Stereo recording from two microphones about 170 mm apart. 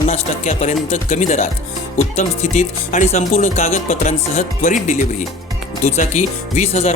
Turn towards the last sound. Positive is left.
turn(degrees=40)  # may be behind; listen again after turning